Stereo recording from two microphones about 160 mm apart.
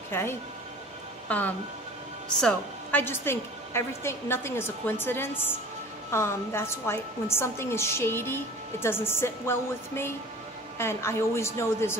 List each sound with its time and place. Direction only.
0.1 s a woman's voice: 15° left (ahead or behind)
2.4 s a woman's voice: 10° left (ahead or behind)